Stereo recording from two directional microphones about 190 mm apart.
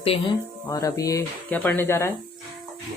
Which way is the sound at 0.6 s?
15° left (ahead or behind).